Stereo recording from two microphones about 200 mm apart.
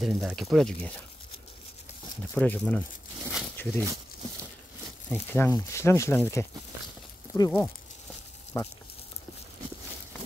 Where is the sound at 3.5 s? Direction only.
10° left (ahead or behind).